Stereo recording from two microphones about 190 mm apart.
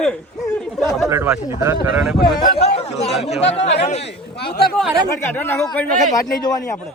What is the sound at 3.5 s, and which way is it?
Speech, 35° left (ahead or behind).